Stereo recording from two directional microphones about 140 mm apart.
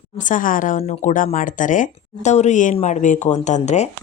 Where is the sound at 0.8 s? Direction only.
55° left (ahead or behind).